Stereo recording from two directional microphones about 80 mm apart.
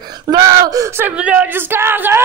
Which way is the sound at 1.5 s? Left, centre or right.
Right.